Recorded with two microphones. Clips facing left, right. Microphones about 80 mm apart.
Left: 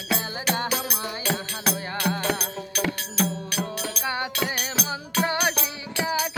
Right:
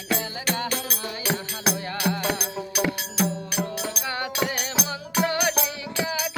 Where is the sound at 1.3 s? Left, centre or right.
Centre.